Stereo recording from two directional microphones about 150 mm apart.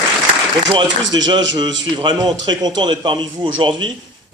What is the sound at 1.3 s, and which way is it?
A man's voice, 30° right (ahead or behind).